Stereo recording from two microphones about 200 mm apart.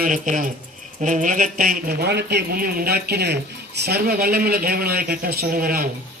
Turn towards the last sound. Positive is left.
turn(degrees=-45)  # may be behind; listen again after turning